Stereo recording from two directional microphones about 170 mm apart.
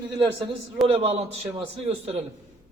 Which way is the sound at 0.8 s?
35° right (ahead or behind).